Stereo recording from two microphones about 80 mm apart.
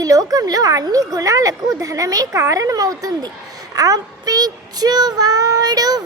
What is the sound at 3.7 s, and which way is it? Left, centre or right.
Child singing, right.